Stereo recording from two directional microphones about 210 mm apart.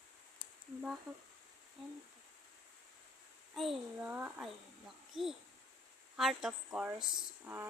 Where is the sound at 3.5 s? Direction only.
Centre (ahead or behind).